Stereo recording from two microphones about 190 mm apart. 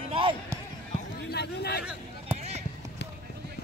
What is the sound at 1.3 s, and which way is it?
Speech, 60° left (ahead or behind).